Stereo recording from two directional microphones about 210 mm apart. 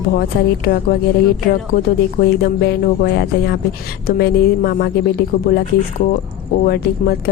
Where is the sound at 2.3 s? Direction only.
50° left (ahead or behind).